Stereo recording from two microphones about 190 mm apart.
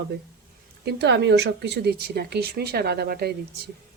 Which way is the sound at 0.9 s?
60° right (ahead or behind).